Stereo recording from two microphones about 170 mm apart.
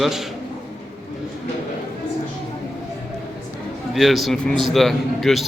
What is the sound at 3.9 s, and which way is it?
A man's voice, centre (ahead or behind).